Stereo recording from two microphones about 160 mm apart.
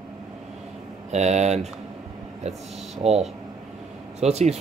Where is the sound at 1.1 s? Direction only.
45° right (ahead or behind).